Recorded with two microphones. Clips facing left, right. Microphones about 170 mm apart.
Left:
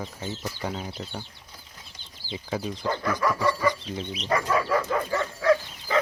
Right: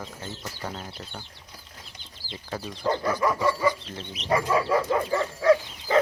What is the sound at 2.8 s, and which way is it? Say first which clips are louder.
Dog: right 3 dB; 20° right (ahead or behind).